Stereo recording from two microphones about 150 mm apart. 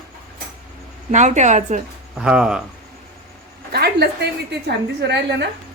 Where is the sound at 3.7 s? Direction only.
90° right.